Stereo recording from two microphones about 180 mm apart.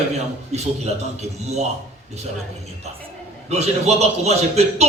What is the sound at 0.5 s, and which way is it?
A man's voice, 35° right (ahead or behind).